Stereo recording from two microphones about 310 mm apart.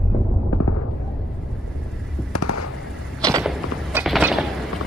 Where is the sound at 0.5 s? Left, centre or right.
Left.